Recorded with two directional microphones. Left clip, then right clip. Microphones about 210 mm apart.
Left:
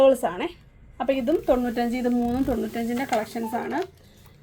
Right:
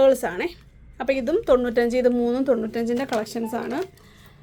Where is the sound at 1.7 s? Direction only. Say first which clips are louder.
Right 6 dB; 55° right (ahead or behind).